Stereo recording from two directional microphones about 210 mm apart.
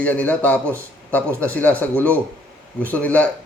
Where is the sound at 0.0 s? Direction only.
5° left (ahead or behind).